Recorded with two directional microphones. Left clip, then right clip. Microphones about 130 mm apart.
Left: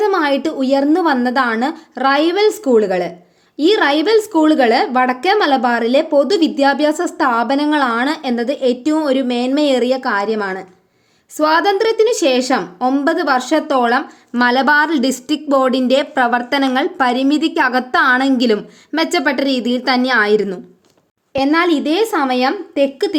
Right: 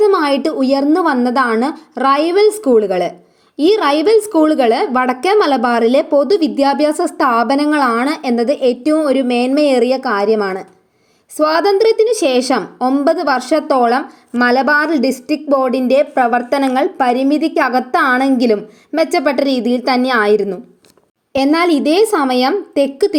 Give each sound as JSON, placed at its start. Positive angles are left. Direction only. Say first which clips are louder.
{"t": 0.0, "sound": "a woman's voice", "louder": "right 3 dB", "side_deg": -15}
{"t": 13.7, "sound": "a woman's voice", "louder": "right 3 dB", "side_deg": 0}
{"t": 14.3, "sound": "a woman's voice", "louder": "even", "side_deg": 20}
{"t": 21.3, "sound": "a woman's voice", "louder": "right 1 dB", "side_deg": -25}